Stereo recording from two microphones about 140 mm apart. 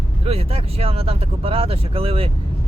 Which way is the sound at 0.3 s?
45° right (ahead or behind).